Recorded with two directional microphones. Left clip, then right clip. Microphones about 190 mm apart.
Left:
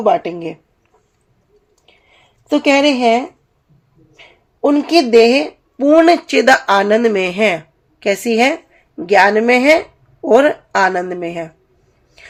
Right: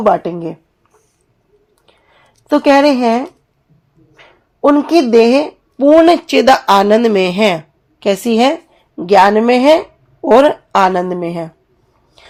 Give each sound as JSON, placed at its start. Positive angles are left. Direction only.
{"t": 0.3, "sound": "speech", "side_deg": -30}
{"t": 2.5, "sound": "speech", "side_deg": -25}